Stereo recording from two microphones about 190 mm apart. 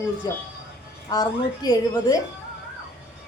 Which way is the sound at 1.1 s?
20° left (ahead or behind).